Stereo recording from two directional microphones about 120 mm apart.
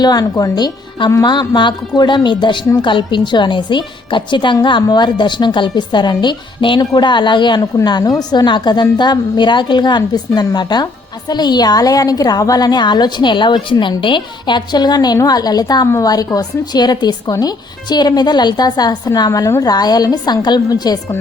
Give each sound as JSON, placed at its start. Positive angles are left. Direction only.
{"t": 0.0, "sound": "a woman's voice", "side_deg": 35}